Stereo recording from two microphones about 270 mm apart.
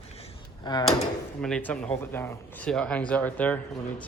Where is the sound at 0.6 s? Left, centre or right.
Centre.